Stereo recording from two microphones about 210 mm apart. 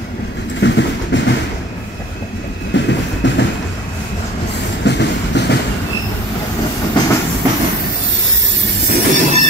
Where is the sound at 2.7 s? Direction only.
55° left (ahead or behind).